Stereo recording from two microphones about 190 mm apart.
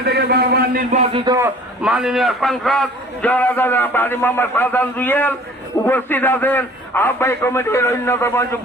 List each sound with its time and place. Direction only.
0.0 s a man's voice: 60° right (ahead or behind)
1.1 s a man's voice: 20° right (ahead or behind)
1.8 s a man's voice: 5° right (ahead or behind); by 8.4 s 15° left (ahead or behind)